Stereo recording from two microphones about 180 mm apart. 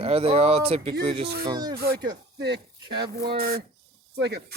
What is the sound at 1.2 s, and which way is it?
Speech, 65° right (ahead or behind).